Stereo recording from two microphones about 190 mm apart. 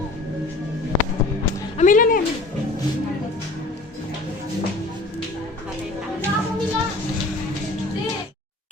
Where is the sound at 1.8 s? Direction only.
45° left (ahead or behind).